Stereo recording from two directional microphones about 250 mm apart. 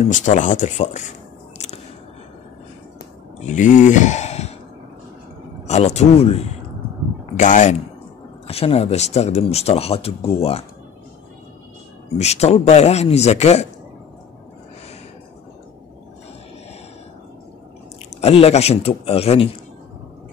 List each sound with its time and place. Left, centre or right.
0.0 s speech: left
3.3 s speech: left
5.7 s speech: left
12.2 s speech: left
18.2 s speech: left